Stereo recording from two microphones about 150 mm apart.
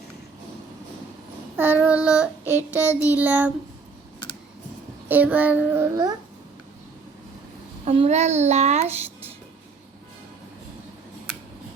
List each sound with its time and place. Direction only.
1.5 s child singing: 10° right (ahead or behind)
5.0 s child singing: 10° right (ahead or behind)
7.9 s child singing: 45° right (ahead or behind)